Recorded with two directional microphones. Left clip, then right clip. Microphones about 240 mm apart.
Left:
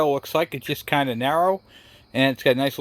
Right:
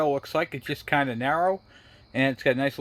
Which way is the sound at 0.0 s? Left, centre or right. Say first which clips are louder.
Left 4 dB; left.